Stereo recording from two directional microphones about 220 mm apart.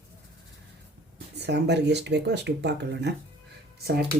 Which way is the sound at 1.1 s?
50° right (ahead or behind).